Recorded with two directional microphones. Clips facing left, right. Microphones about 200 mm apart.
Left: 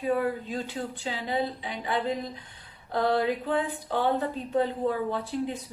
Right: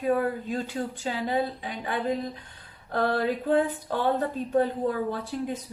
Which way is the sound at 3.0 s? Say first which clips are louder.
Left 1 dB; 15° left (ahead or behind).